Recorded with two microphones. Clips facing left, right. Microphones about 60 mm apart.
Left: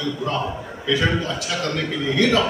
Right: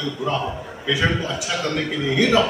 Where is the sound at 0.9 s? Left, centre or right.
Centre.